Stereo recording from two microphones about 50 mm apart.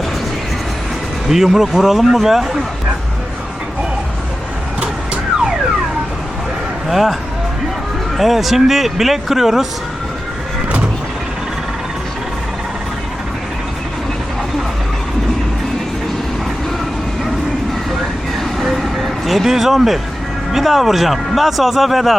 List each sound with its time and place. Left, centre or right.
1.3 s speech: centre
4.8 s vehicle: right
6.8 s speech: centre
18.6 s a sound: centre
20.5 s speech: centre